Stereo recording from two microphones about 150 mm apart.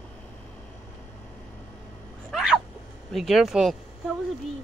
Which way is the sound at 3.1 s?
Centre (ahead or behind).